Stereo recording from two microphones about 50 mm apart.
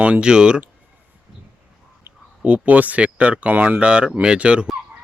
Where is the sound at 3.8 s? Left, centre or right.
Right.